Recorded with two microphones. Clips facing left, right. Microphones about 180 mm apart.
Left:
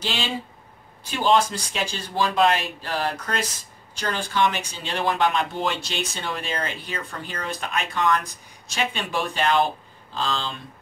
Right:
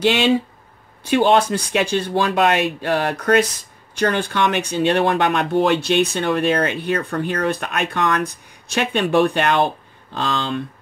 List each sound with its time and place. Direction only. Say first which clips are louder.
0.0 s speech: right 12 dB; 70° right (ahead or behind)